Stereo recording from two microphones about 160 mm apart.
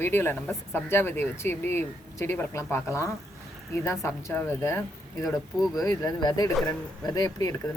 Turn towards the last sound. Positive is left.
turn(degrees=20)  # may be behind; listen again after turning